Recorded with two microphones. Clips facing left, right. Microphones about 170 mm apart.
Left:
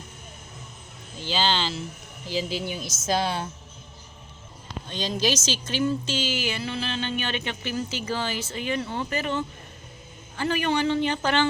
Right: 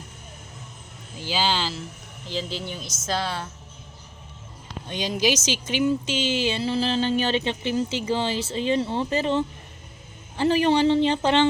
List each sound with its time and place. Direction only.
1.2 s speech: 10° right (ahead or behind)
2.2 s speech: 5° left (ahead or behind)
4.9 s speech: 15° right (ahead or behind)